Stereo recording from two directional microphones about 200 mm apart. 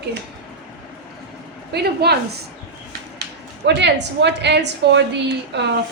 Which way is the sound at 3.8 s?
60° right (ahead or behind).